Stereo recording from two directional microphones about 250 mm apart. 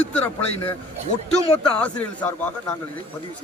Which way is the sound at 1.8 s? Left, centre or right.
Centre.